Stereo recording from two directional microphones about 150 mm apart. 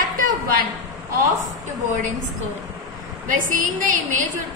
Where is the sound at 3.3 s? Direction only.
60° right (ahead or behind).